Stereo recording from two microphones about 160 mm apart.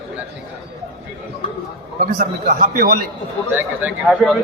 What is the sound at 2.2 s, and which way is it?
Speech, 55° right (ahead or behind).